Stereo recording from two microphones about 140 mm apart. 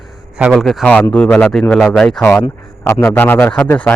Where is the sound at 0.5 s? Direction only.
Centre (ahead or behind).